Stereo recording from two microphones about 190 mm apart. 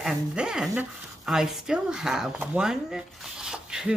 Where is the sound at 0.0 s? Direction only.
5° right (ahead or behind).